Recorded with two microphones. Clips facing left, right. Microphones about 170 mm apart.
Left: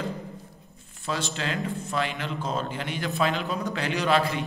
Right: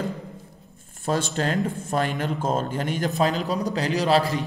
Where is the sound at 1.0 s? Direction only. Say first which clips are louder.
Right 6 dB; 45° right (ahead or behind).